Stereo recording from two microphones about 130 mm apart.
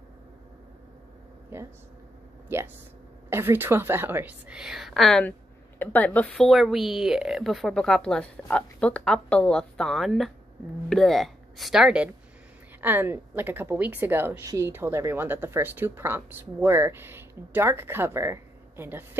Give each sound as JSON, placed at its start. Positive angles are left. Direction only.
{"t": 1.5, "sound": "a woman's voice", "side_deg": -20}